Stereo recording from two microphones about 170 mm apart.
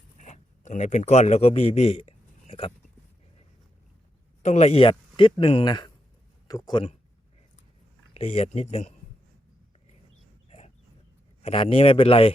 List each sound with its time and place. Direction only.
0.2 s speech: 50° left (ahead or behind)
4.4 s speech: 40° left (ahead or behind)
8.1 s speech: 35° left (ahead or behind)
11.4 s speech: 35° left (ahead or behind)